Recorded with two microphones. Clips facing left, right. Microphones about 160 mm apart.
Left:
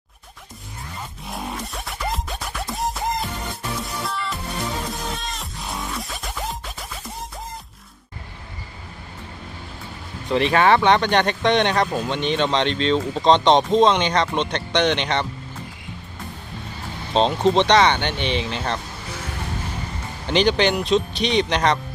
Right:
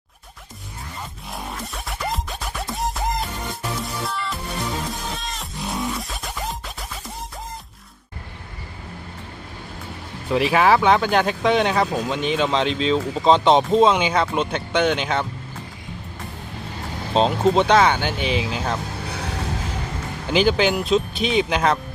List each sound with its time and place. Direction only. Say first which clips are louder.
1.3 s music: left 2 dB; centre (ahead or behind)
10.2 s speech: even; 5° right (ahead or behind)
17.2 s speech: even; 5° right (ahead or behind)
19.1 s music: right 1 dB; 70° right (ahead or behind)
20.2 s speech: even; 5° right (ahead or behind)